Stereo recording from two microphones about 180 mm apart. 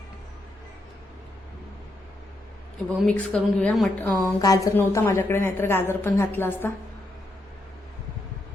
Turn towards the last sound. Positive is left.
turn(degrees=10)  # may be behind; listen again after turning